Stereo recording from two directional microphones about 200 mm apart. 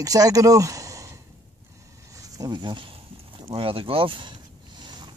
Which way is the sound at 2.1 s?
20° right (ahead or behind).